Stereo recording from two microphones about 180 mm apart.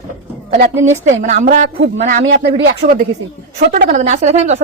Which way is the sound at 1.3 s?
40° right (ahead or behind).